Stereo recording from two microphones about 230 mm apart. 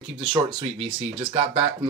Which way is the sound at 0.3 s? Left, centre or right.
Centre.